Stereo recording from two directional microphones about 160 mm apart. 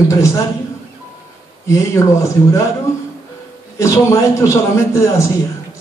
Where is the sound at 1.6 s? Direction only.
20° left (ahead or behind).